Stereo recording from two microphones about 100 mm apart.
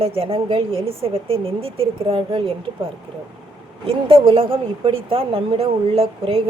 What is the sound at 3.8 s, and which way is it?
Speech, 70° right (ahead or behind).